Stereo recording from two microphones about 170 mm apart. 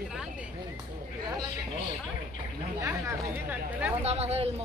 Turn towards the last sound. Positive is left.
turn(degrees=-40)  # may be behind; listen again after turning